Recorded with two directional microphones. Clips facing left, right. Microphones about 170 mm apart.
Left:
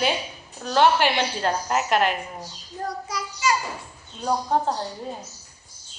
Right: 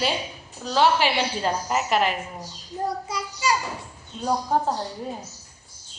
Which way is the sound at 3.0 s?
30° right (ahead or behind).